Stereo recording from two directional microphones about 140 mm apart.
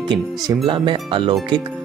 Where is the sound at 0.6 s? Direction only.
35° right (ahead or behind).